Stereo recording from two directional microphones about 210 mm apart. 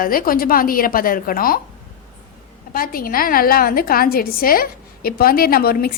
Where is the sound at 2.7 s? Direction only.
45° left (ahead or behind).